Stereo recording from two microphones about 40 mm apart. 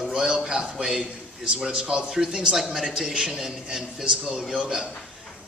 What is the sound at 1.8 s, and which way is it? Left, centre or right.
Speech, right.